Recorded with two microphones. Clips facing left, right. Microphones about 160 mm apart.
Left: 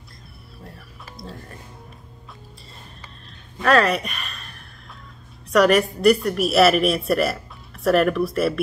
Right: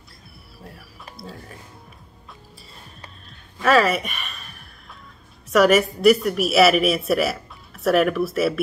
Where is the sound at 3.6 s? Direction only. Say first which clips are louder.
Even; 5° right (ahead or behind).